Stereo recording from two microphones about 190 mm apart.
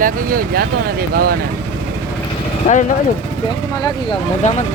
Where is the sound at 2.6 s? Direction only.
30° left (ahead or behind).